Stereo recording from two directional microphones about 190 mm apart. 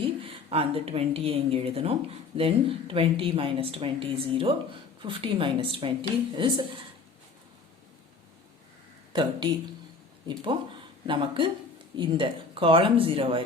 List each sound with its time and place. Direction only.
0.0 s a woman's voice: 30° right (ahead or behind)
9.1 s a woman's voice: 25° right (ahead or behind)